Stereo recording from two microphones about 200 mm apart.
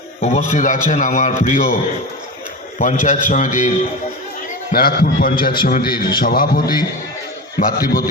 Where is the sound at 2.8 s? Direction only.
40° left (ahead or behind).